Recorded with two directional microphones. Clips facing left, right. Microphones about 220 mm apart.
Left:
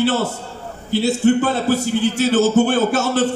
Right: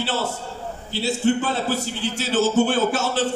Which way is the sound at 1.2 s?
50° left (ahead or behind).